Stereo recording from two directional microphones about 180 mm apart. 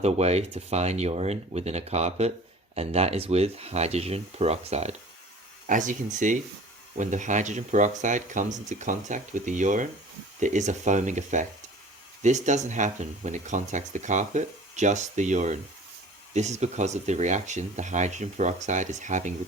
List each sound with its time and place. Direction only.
0.0 s speech: 35° right (ahead or behind)